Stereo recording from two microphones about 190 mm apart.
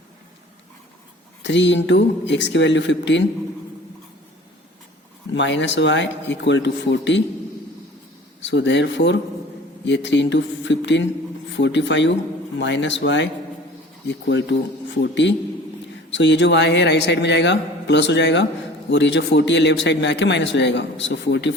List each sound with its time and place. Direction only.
1.4 s a man's voice: 70° left (ahead or behind)
5.3 s a man's voice: 70° left (ahead or behind)
8.4 s a man's voice: 70° left (ahead or behind)